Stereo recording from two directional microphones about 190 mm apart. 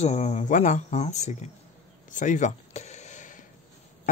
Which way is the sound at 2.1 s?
40° left (ahead or behind).